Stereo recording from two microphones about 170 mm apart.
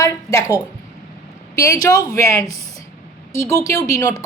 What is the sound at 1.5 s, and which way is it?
A woman's voice, 20° left (ahead or behind).